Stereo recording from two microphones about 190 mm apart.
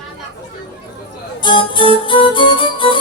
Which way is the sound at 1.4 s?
25° left (ahead or behind).